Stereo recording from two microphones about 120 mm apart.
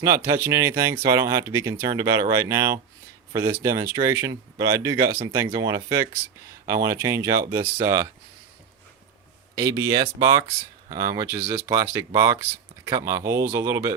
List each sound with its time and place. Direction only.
0.3 s speech: 25° right (ahead or behind)
9.6 s speech: 25° right (ahead or behind)